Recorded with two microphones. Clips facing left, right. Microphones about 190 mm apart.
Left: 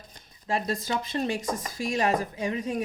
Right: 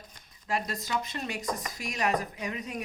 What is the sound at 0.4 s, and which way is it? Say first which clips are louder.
Speech: left 4 dB; 30° left (ahead or behind).